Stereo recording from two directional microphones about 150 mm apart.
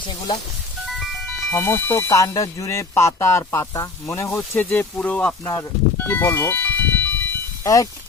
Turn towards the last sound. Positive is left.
turn(degrees=20)  # may be behind; listen again after turning